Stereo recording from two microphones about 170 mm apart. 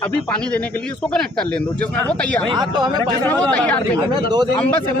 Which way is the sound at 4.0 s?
25° right (ahead or behind).